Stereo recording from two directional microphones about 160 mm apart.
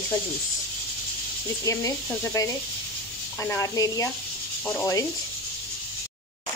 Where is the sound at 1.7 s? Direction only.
20° left (ahead or behind).